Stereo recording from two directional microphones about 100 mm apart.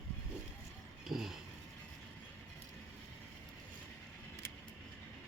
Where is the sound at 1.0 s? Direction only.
5° right (ahead or behind).